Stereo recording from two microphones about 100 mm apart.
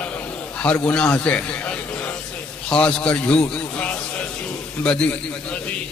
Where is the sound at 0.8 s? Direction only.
10° left (ahead or behind).